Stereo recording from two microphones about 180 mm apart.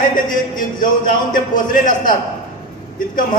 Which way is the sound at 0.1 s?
50° left (ahead or behind).